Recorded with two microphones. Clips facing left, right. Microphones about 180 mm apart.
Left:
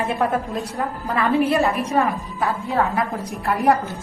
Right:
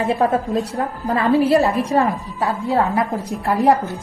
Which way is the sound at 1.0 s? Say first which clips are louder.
Right 3 dB; 30° right (ahead or behind).